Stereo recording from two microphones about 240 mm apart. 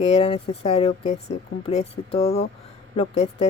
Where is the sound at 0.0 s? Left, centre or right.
Left.